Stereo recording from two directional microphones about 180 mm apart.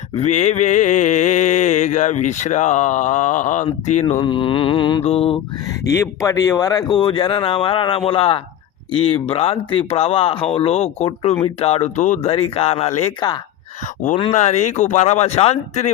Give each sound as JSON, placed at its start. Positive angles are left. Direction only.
{"t": 0.2, "sound": "mantra", "side_deg": 40}
{"t": 4.2, "sound": "speech", "side_deg": 30}
{"t": 5.0, "sound": "mantra", "side_deg": 35}
{"t": 5.9, "sound": "speech", "side_deg": 15}
{"t": 8.9, "sound": "mantra", "side_deg": 30}
{"t": 14.3, "sound": "mantra", "side_deg": 40}